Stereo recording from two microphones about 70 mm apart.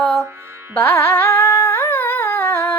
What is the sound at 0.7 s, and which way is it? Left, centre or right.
Humming, left.